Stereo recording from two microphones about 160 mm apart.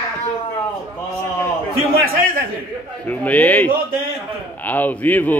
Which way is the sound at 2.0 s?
60° right (ahead or behind).